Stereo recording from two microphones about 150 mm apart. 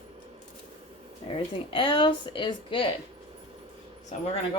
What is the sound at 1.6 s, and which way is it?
Speech, 35° left (ahead or behind).